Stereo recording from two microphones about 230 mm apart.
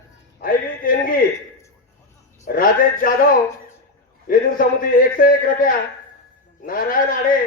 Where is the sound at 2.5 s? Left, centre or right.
Left.